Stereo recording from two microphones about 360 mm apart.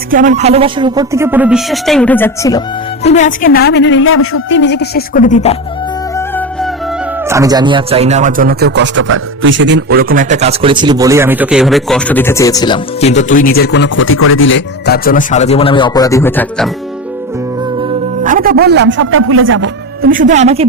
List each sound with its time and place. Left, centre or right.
0.1 s speech: right; by 5.5 s centre
6.1 s music: centre
7.3 s speech: centre
17.8 s a man's voice: right